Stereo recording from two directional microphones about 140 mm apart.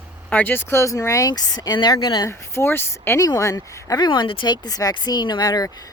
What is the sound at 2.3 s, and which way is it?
Speech, 20° left (ahead or behind).